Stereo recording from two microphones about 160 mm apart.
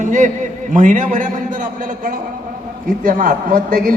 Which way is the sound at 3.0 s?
55° right (ahead or behind).